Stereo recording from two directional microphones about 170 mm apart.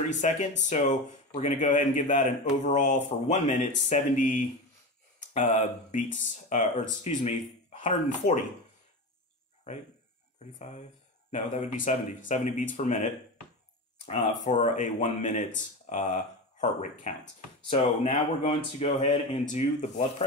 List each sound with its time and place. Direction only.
0.1 s speech: 45° left (ahead or behind)
5.3 s speech: 45° left (ahead or behind)
10.6 s speech: 45° left (ahead or behind)
14.4 s speech: 45° left (ahead or behind)